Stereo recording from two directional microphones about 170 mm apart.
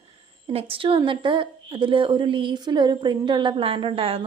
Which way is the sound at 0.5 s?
30° right (ahead or behind).